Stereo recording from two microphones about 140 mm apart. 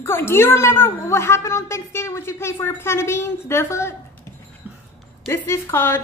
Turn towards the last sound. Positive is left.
turn(degrees=15)  # may be behind; listen again after turning